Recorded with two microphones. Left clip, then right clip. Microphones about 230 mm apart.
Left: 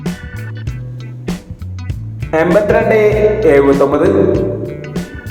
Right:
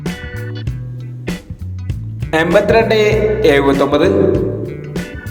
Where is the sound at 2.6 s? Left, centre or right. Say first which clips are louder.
Even; right.